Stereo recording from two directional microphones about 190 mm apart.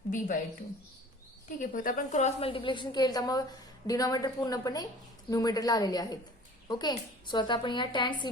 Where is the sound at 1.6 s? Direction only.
45° left (ahead or behind).